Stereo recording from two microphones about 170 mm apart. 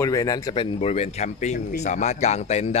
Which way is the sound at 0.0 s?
20° left (ahead or behind).